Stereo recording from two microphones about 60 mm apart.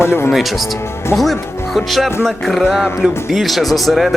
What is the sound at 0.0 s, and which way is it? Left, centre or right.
Speech, left.